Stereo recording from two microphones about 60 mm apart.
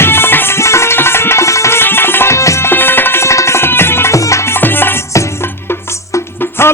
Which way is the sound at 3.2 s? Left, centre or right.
Left.